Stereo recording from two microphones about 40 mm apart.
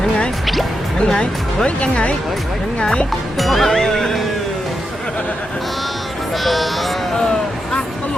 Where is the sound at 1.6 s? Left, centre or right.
Left.